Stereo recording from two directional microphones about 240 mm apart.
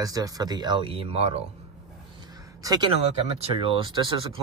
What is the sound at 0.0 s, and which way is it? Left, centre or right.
Speech, centre.